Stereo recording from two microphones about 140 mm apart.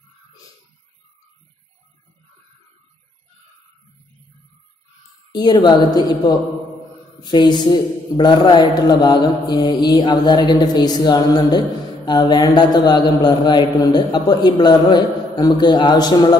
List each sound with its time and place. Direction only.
5.3 s a man's voice: 30° left (ahead or behind)